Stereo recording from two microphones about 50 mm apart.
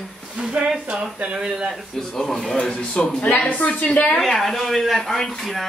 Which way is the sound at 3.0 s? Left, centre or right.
Centre.